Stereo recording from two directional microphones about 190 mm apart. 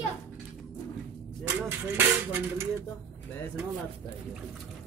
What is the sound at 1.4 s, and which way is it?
Speech, 10° right (ahead or behind).